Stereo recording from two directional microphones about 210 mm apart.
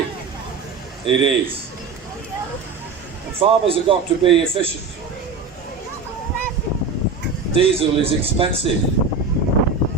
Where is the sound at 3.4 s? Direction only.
25° right (ahead or behind).